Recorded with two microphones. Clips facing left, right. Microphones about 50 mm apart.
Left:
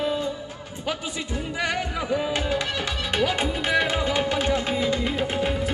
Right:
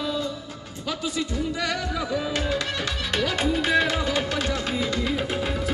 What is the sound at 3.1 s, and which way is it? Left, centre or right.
Music, left.